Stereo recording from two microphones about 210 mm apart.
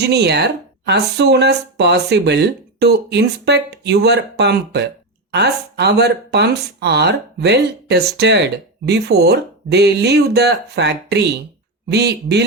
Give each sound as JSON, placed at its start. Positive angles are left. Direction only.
{"t": 0.0, "sound": "speech", "side_deg": -50}